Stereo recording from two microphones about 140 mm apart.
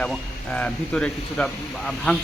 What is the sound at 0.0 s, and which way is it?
Speech, 10° left (ahead or behind).